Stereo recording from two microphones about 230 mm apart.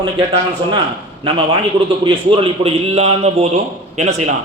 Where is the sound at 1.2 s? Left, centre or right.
Right.